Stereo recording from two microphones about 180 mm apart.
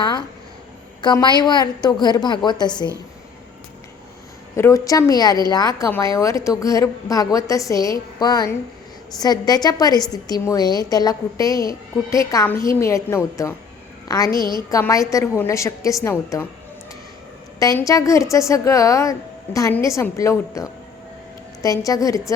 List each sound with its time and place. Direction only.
0.0 s a sound: 25° left (ahead or behind)
1.0 s speech: 25° left (ahead or behind)
4.5 s a woman's voice: 15° left (ahead or behind)
14.3 s a woman's voice: 25° right (ahead or behind)
14.7 s a woman's voice: 20° left (ahead or behind)
17.6 s a woman's voice: 20° left (ahead or behind)